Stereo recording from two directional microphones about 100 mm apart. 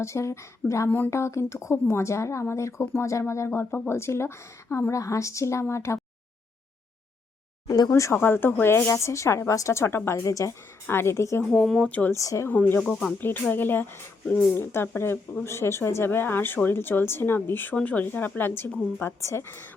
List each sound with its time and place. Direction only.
0.0 s a woman's voice: 30° left (ahead or behind)
0.9 s a woman's voice: 20° left (ahead or behind)
7.7 s a woman's voice: 35° left (ahead or behind)
11.4 s speech: 5° left (ahead or behind)
11.9 s speech: 15° left (ahead or behind)
12.1 s speech: 30° left (ahead or behind)
12.5 s a woman's voice: 20° left (ahead or behind)
12.8 s speech: 5° left (ahead or behind)
13.1 s a woman's voice: 20° left (ahead or behind)